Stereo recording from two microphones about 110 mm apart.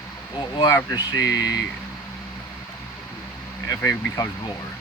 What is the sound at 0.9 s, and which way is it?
Speech, 35° left (ahead or behind).